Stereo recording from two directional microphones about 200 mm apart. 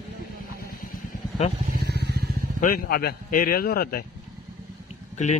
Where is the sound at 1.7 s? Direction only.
55° right (ahead or behind).